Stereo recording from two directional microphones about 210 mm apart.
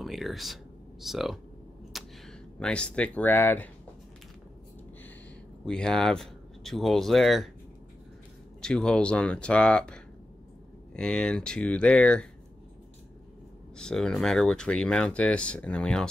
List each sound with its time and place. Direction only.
0.0 s speech: centre (ahead or behind)
5.7 s speech: 5° left (ahead or behind)
8.5 s speech: 5° left (ahead or behind)
13.7 s speech: 5° left (ahead or behind)